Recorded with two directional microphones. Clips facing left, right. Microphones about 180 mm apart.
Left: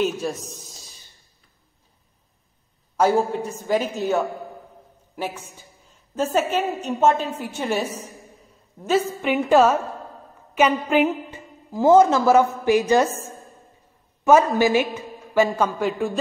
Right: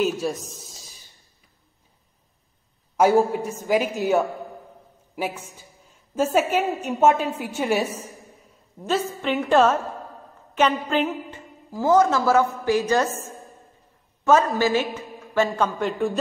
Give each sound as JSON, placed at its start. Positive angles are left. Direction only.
{"t": 0.0, "sound": "speech", "side_deg": 0}
{"t": 3.0, "sound": "a woman's voice", "side_deg": -10}
{"t": 6.1, "sound": "a woman's voice", "side_deg": -5}
{"t": 8.8, "sound": "a woman's voice", "side_deg": 5}
{"t": 14.2, "sound": "a woman's voice", "side_deg": 15}